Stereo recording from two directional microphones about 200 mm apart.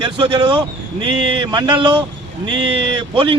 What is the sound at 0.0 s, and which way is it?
A man's voice, 25° right (ahead or behind).